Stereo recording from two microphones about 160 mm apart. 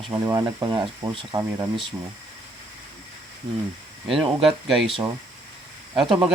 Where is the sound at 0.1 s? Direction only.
20° right (ahead or behind).